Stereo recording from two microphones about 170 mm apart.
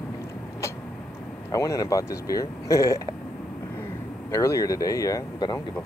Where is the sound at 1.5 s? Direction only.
20° left (ahead or behind).